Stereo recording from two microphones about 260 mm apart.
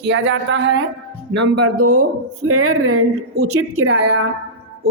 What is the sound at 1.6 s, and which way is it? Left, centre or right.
Speech, right.